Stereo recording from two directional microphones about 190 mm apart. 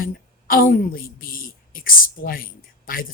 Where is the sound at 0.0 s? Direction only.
50° left (ahead or behind).